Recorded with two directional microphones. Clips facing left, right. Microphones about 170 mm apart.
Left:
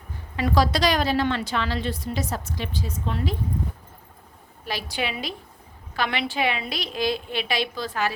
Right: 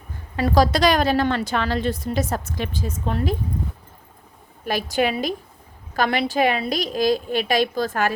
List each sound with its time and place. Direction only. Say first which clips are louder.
0.3 s a woman's voice: right 4 dB; 40° right (ahead or behind)
4.6 s a woman's voice: right 8 dB; 50° right (ahead or behind)